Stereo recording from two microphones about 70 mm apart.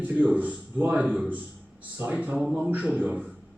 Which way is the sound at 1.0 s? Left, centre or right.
Centre.